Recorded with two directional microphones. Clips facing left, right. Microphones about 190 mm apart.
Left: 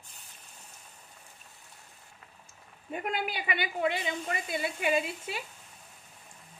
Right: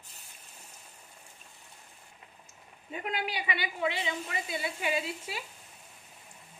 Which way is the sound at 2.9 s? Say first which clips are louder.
Left 2 dB; 50° left (ahead or behind).